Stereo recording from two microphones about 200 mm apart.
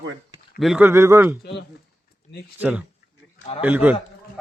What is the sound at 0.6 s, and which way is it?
Speech, 5° right (ahead or behind).